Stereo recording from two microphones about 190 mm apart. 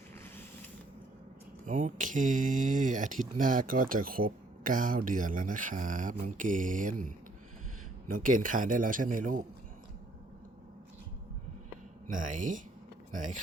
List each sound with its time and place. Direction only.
1.6 s speech: 45° right (ahead or behind)
8.1 s speech: 45° right (ahead or behind)
12.0 s speech: 45° right (ahead or behind)